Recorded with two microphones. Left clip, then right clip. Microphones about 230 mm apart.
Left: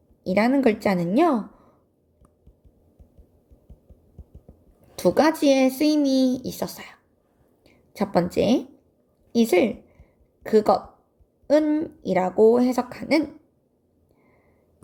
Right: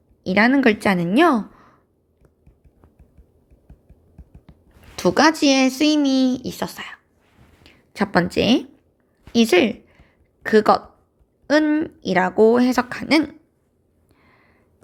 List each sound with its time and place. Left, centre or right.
0.3 s speech: centre
4.9 s a woman's voice: centre
11.8 s speech: right